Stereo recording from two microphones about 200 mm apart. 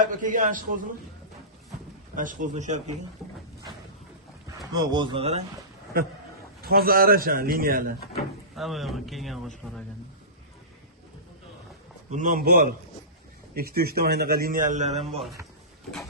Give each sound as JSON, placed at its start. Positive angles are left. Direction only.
{"t": 0.0, "sound": "a man's voice", "side_deg": -40}
{"t": 2.1, "sound": "a man's voice", "side_deg": -40}
{"t": 4.7, "sound": "speech", "side_deg": -20}
{"t": 6.6, "sound": "a man's voice", "side_deg": -50}
{"t": 8.1, "sound": "speech", "side_deg": 0}
{"t": 12.1, "sound": "a man's voice", "side_deg": -40}